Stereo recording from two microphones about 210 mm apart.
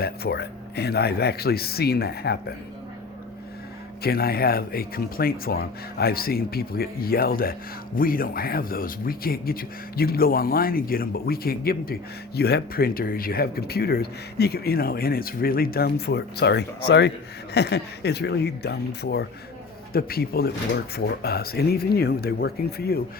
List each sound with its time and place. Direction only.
0.0 s speech: 50° left (ahead or behind)
4.0 s speech: 45° left (ahead or behind)